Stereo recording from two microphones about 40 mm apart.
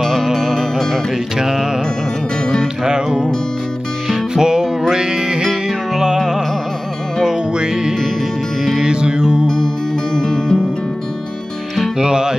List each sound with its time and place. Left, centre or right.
0.0 s music: centre
1.4 s music: centre
2.8 s music: centre
10.1 s music: centre
11.7 s music: centre